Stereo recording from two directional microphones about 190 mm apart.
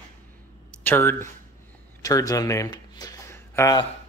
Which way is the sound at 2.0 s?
20° left (ahead or behind).